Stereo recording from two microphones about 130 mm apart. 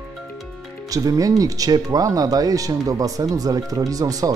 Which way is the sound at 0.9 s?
25° right (ahead or behind).